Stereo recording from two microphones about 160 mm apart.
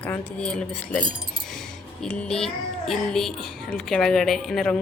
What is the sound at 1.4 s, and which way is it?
Child singing, 5° left (ahead or behind).